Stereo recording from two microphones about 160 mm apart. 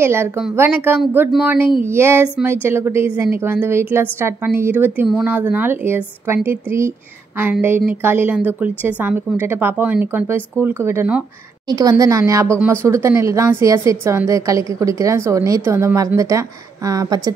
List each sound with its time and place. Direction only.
0.0 s a woman's voice: 15° right (ahead or behind)
11.7 s a woman's voice: 20° right (ahead or behind)